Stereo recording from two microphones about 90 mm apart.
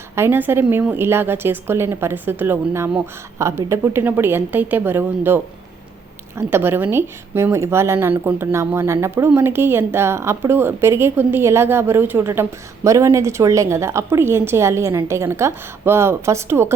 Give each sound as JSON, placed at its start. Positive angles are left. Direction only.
{"t": 0.2, "sound": "a woman's voice", "side_deg": -20}